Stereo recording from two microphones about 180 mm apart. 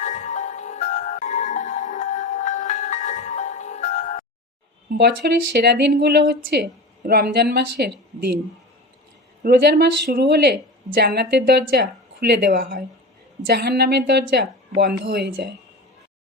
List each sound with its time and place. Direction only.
0.0 s music: 40° left (ahead or behind)
4.9 s a woman's voice: 65° right (ahead or behind)
9.4 s a woman's voice: 65° right (ahead or behind)